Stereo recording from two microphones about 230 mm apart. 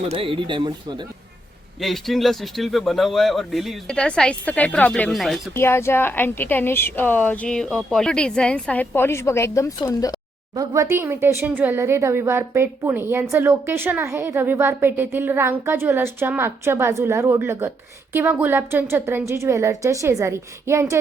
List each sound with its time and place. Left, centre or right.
0.1 s speech: right
1.8 s speech: centre
10.5 s a woman's voice: centre